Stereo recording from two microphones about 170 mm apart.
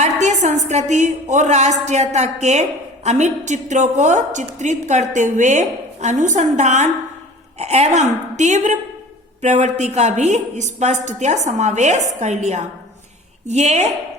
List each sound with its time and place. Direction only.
0.0 s a woman's voice: 45° right (ahead or behind)